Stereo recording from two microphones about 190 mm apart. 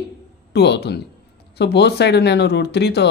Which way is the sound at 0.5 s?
60° left (ahead or behind).